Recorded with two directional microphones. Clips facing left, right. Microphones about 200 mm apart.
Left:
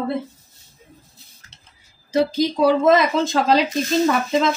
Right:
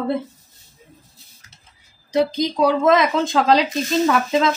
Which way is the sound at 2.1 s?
5° left (ahead or behind).